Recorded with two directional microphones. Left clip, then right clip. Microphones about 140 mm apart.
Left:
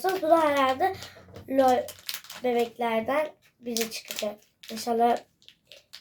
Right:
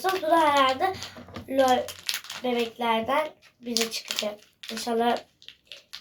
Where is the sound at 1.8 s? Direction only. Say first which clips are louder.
Right 5 dB; 15° left (ahead or behind).